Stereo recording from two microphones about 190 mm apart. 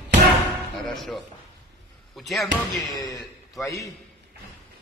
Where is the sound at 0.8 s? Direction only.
Centre (ahead or behind).